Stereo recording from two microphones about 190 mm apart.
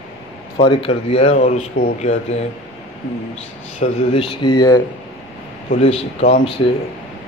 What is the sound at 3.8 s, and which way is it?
Speech, 30° left (ahead or behind).